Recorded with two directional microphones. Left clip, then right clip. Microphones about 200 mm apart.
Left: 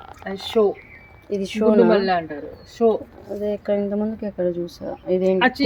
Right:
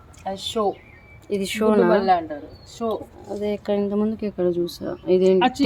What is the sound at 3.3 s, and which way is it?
Speech, centre (ahead or behind).